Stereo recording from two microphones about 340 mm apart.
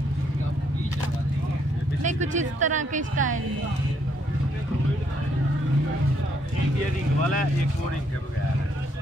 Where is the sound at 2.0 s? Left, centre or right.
Right.